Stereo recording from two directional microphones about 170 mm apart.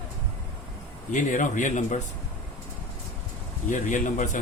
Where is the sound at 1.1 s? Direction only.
50° left (ahead or behind).